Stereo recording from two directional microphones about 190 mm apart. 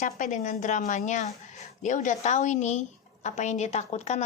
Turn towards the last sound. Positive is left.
turn(degrees=35)  # may be behind; listen again after turning